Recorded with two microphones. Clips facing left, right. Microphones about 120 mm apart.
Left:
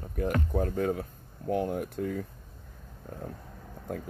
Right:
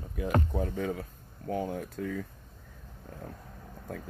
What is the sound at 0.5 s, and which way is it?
Speech, 60° left (ahead or behind).